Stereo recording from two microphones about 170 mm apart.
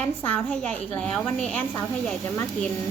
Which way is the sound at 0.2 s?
10° left (ahead or behind).